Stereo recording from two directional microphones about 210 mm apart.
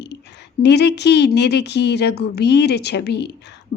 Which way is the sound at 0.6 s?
55° left (ahead or behind).